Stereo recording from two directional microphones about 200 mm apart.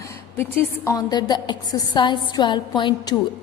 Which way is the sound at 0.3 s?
15° left (ahead or behind).